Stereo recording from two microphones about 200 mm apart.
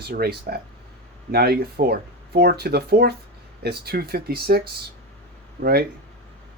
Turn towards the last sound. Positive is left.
turn(degrees=-50)  # may be behind; listen again after turning